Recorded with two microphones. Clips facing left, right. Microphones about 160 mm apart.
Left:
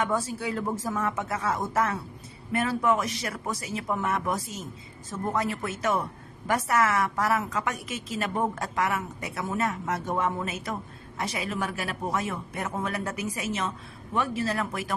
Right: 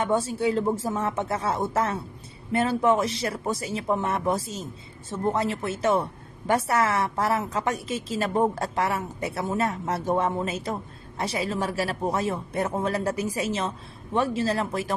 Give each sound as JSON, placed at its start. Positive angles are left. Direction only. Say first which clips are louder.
{"t": 0.0, "sound": "a woman's voice", "louder": "right 4 dB", "side_deg": -30}